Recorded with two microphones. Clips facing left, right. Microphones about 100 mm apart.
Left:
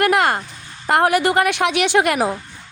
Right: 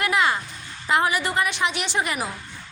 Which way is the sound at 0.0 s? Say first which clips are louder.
Left 6 dB; 55° left (ahead or behind).